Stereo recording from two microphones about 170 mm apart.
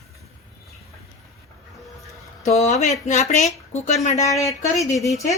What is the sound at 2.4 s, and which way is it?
Speech, 40° left (ahead or behind).